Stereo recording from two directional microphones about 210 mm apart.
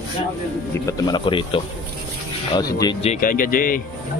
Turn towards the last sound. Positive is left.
turn(degrees=40)  # may be behind; listen again after turning